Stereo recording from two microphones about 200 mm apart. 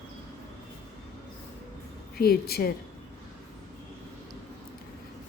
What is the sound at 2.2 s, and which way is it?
Speech, 50° left (ahead or behind).